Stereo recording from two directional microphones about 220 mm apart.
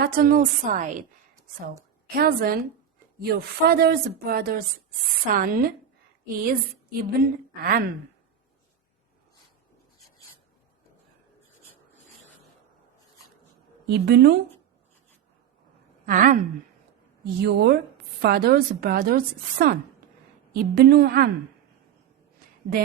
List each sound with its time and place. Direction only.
0.0 s a woman's voice: 40° right (ahead or behind)
2.1 s a woman's voice: 45° right (ahead or behind)
13.8 s a woman's voice: 50° right (ahead or behind)
16.0 s a woman's voice: 35° right (ahead or behind)
17.4 s a woman's voice: 50° right (ahead or behind)